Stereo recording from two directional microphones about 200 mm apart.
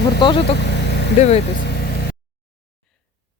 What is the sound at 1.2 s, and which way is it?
Speech, 30° left (ahead or behind).